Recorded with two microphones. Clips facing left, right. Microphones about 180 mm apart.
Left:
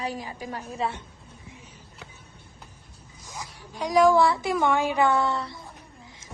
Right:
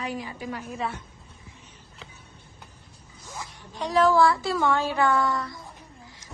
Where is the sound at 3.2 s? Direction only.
15° left (ahead or behind).